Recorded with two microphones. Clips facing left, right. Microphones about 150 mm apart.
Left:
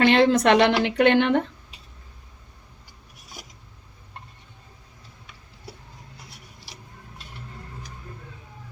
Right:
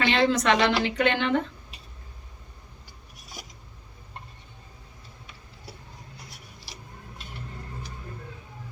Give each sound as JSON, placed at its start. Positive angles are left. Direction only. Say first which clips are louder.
{"t": 0.0, "sound": "a woman's voice", "louder": "left 5 dB", "side_deg": 55}